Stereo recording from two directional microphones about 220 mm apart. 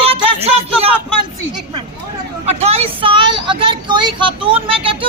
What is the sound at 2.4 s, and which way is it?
Speech, 30° right (ahead or behind).